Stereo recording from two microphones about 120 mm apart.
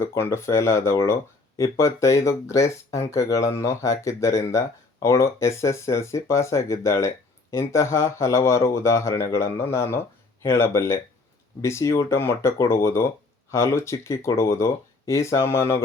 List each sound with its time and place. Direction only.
0.0 s speech: 20° left (ahead or behind)